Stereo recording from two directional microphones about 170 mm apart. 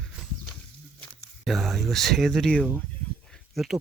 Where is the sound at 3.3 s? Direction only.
Centre (ahead or behind).